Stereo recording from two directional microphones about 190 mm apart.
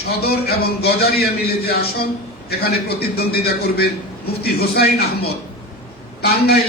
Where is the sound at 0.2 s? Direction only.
55° left (ahead or behind).